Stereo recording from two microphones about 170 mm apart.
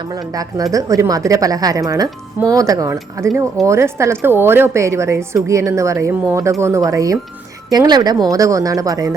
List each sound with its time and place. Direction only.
0.3 s a woman's voice: 20° right (ahead or behind)